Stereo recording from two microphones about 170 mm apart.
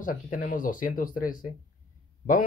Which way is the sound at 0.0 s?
50° left (ahead or behind).